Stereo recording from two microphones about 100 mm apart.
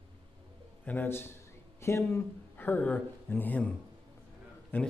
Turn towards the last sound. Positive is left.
turn(degrees=20)  # may be behind; listen again after turning